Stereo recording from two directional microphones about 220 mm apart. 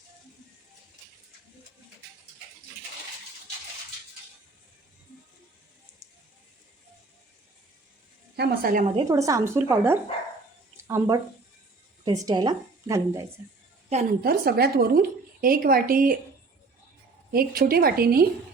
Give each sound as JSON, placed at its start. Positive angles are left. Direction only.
{"t": 8.4, "sound": "a woman's voice", "side_deg": -45}
{"t": 9.0, "sound": "a woman's voice", "side_deg": -15}
{"t": 13.9, "sound": "a woman's voice", "side_deg": -40}
{"t": 17.3, "sound": "a woman's voice", "side_deg": -45}